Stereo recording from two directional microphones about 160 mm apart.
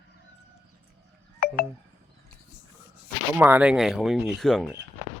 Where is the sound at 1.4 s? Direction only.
70° left (ahead or behind).